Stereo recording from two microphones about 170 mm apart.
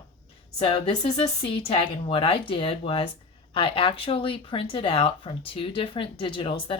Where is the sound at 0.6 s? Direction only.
30° left (ahead or behind).